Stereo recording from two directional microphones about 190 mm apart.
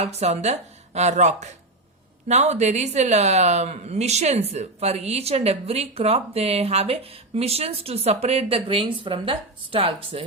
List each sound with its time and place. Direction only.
0.0 s a woman's voice: 35° right (ahead or behind)